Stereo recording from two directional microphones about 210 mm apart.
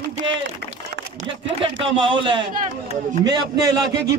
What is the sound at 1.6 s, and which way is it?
Speech, 25° right (ahead or behind).